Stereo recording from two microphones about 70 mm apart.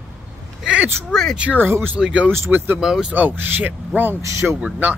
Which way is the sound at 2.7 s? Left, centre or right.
Centre.